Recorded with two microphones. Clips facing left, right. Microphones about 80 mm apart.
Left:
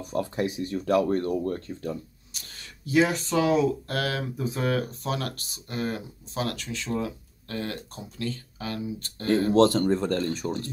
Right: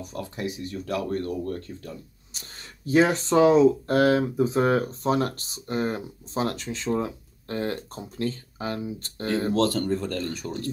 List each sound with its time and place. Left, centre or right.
0.1 s speech: left
2.3 s speech: right
9.5 s speech: left